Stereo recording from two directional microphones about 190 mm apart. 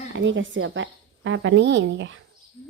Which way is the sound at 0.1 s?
80° right.